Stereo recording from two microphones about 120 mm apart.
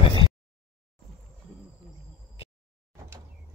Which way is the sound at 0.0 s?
45° left (ahead or behind).